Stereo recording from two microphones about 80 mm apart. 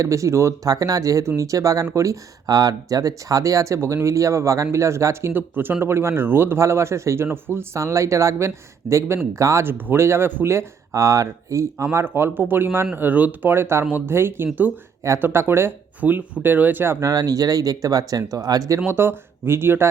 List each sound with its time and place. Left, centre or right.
0.0 s speech: right
0.7 s speech: right
5.3 s speech: right
9.6 s speech: right
16.0 s speech: right
17.1 s speech: right
18.9 s speech: right